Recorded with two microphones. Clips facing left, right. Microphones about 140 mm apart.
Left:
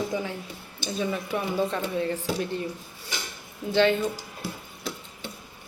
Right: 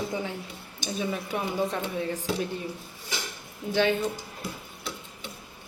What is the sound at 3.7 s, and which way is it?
Speech, 10° right (ahead or behind).